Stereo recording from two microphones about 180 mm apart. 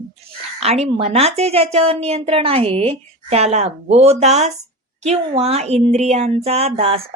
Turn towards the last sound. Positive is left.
turn(degrees=-35)  # may be behind; listen again after turning